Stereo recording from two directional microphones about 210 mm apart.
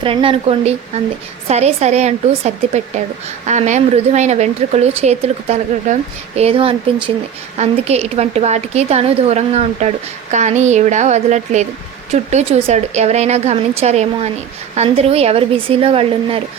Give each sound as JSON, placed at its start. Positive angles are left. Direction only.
{"t": 0.0, "sound": "a woman's voice", "side_deg": -25}